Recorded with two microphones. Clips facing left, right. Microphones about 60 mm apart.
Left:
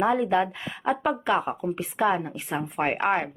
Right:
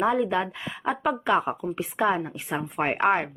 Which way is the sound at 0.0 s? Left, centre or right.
Centre.